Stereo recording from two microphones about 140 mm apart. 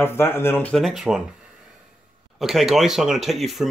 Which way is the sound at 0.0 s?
15° left (ahead or behind).